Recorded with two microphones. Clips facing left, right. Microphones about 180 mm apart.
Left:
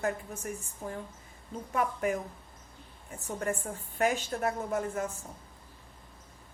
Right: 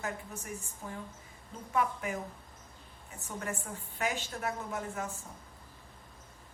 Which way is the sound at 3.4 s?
50° left (ahead or behind).